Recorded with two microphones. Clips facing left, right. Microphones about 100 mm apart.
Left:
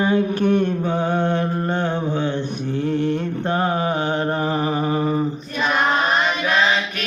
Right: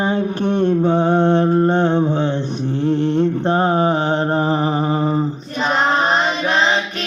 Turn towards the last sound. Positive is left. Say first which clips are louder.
# right 2 dB
turn(degrees=-25)  # may be behind; listen again after turning